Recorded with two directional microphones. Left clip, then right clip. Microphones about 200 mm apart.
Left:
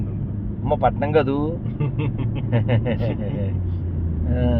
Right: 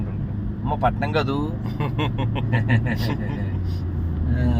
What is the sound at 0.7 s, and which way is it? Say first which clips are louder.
Speech: left 4 dB; 40° left (ahead or behind).